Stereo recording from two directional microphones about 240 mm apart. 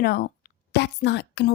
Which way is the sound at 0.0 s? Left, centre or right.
Left.